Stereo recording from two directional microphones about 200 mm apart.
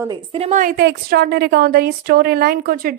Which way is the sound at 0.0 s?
25° right (ahead or behind).